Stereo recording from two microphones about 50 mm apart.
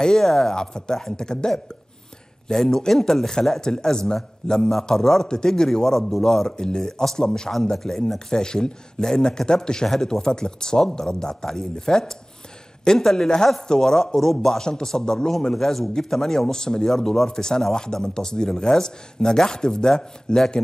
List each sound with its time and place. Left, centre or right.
0.0 s speech: centre